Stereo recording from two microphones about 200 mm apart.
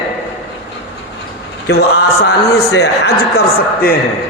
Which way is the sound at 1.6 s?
55° left (ahead or behind).